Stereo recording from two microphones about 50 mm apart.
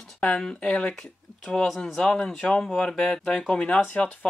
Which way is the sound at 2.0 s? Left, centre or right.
Centre.